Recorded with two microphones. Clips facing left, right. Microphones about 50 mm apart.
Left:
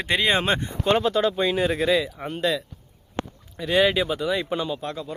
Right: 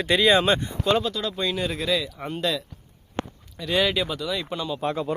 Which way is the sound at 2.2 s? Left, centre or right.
Centre.